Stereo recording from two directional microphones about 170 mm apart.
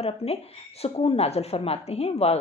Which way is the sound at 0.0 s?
35° left (ahead or behind).